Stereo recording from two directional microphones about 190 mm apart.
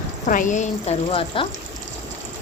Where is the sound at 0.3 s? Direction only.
45° left (ahead or behind).